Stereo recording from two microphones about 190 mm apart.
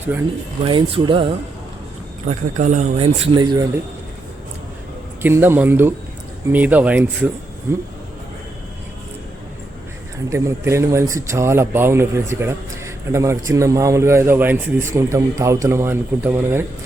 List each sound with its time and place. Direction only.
0.6 s speech: 25° right (ahead or behind)
2.2 s speech: 40° right (ahead or behind)
3.3 s speech: 20° right (ahead or behind)
5.2 s speech: 10° right (ahead or behind)
10.2 s speech: 15° right (ahead or behind)